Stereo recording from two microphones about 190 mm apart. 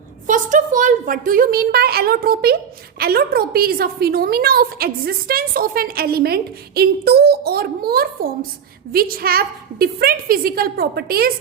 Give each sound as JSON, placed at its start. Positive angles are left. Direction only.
{"t": 0.3, "sound": "a woman's voice", "side_deg": -45}